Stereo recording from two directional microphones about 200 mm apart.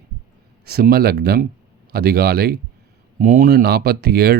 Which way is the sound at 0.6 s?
50° right (ahead or behind).